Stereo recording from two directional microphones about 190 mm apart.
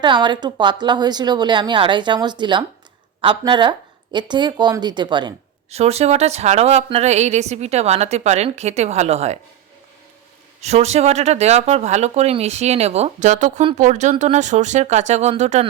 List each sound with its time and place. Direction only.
0.0 s a woman's voice: 25° right (ahead or behind)
5.7 s a woman's voice: 35° right (ahead or behind)
10.6 s a woman's voice: 35° right (ahead or behind)